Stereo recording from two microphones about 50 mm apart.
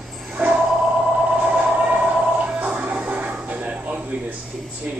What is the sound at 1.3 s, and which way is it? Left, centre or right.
Music, right.